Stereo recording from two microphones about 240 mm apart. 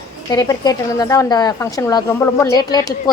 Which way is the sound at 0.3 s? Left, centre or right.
Centre.